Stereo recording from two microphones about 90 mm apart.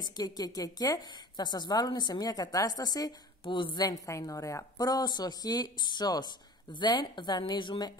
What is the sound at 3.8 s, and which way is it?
Speech, 40° left (ahead or behind).